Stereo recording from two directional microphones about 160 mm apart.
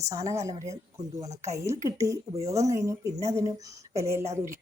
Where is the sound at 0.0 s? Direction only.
20° right (ahead or behind).